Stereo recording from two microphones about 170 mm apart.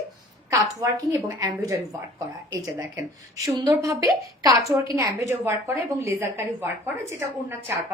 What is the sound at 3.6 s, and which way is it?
A woman's voice, 20° right (ahead or behind).